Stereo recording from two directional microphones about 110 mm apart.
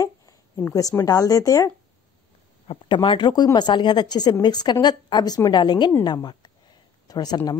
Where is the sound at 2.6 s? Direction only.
50° left (ahead or behind).